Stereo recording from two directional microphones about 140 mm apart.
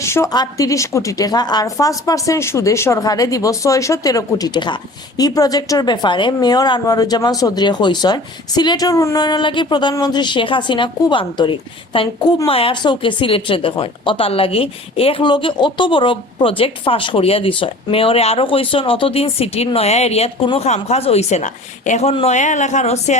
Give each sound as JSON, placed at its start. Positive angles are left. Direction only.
{"t": 0.0, "sound": "a woman's voice", "side_deg": 20}